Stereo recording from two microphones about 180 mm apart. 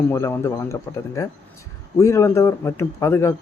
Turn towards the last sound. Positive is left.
turn(degrees=15)  # may be behind; listen again after turning